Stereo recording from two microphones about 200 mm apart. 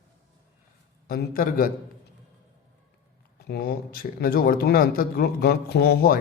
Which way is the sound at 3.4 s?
50° left (ahead or behind).